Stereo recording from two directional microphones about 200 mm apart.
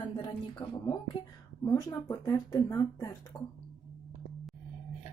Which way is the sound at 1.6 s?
10° left (ahead or behind).